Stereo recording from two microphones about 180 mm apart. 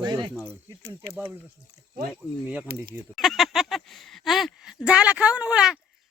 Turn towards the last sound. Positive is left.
turn(degrees=-5)  # may be behind; listen again after turning